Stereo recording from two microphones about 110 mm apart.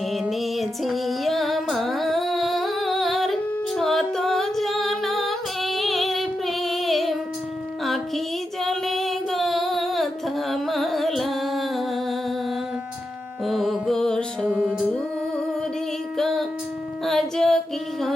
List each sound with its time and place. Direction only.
0.1 s music: centre (ahead or behind)
8.6 s female singing: centre (ahead or behind)
13.4 s music: centre (ahead or behind)
14.4 s music: 15° right (ahead or behind)
16.1 s music: 5° left (ahead or behind)